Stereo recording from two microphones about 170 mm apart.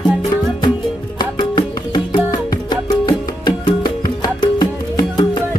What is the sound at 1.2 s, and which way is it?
Music, 25° left (ahead or behind).